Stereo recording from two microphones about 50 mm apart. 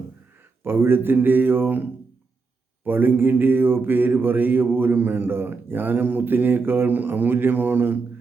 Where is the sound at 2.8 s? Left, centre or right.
Right.